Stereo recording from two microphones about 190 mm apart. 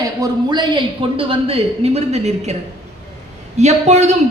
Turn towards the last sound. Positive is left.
turn(degrees=-35)  # may be behind; listen again after turning